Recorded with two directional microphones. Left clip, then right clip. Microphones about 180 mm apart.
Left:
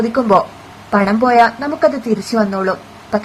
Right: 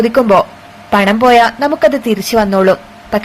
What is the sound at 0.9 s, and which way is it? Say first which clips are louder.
A woman's voice: right 5 dB; 20° right (ahead or behind).